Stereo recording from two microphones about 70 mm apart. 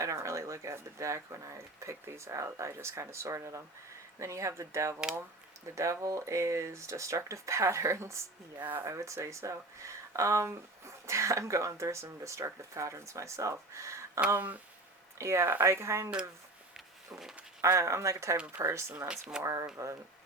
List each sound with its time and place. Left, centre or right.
0.0 s speech: right
14.3 s speech: right
15.2 s speech: right
16.7 s a sound: centre
17.6 s speech: right
18.9 s speech: centre
19.4 s speech: right